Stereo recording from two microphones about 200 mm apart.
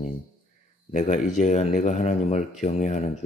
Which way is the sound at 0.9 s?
35° left (ahead or behind).